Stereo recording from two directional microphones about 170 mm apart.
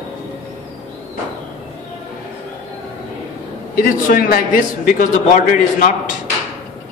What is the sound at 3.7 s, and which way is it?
A man's voice, 55° left (ahead or behind).